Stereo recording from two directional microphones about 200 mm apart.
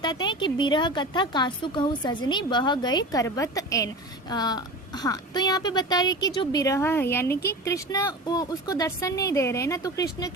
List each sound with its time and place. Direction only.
0.0 s a woman's voice: 20° left (ahead or behind)